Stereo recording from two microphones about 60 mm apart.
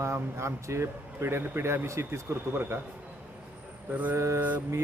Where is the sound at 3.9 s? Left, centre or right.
Right.